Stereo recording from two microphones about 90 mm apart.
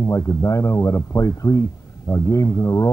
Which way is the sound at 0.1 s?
35° left (ahead or behind).